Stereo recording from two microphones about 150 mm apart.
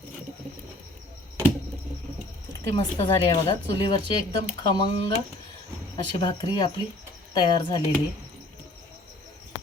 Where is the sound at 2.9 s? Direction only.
30° left (ahead or behind).